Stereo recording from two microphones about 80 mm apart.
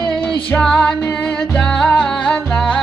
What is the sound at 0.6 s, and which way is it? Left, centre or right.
Music, centre.